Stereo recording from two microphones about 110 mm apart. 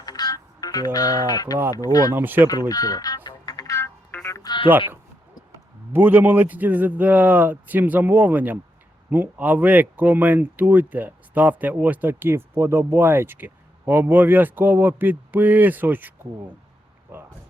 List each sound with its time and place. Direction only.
0.0 s music: 35° left (ahead or behind)
0.9 s speech: 35° left (ahead or behind)
2.1 s speech: 20° right (ahead or behind)
2.5 s speech: 35° left (ahead or behind)
3.2 s music: 40° left (ahead or behind)
3.8 s music: 20° left (ahead or behind)
4.4 s music: 45° left (ahead or behind)
5.5 s speech: 20° right (ahead or behind)